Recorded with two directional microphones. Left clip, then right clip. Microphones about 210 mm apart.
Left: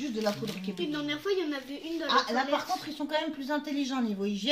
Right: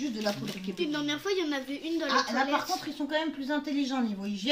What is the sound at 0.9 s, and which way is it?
A woman's voice, 50° right (ahead or behind).